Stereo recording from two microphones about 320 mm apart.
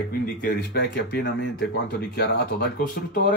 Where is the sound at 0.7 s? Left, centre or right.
Left.